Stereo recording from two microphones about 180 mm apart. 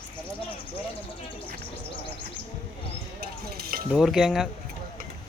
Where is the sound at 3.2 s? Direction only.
60° right (ahead or behind).